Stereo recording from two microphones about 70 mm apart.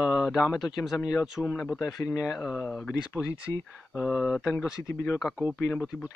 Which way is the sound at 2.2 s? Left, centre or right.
Centre.